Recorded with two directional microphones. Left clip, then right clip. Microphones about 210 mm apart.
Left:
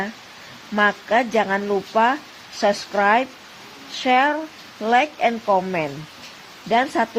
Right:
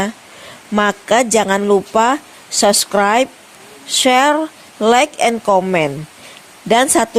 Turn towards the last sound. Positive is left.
turn(degrees=-50)  # may be behind; listen again after turning